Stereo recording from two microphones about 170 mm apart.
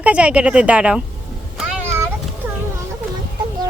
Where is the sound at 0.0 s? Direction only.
5° right (ahead or behind).